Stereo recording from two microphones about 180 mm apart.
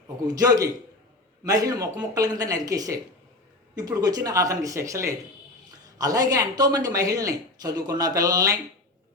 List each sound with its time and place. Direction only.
0.3 s speech: 20° right (ahead or behind)